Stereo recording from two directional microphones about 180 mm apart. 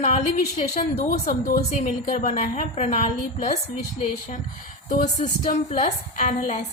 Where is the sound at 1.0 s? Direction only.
50° left (ahead or behind).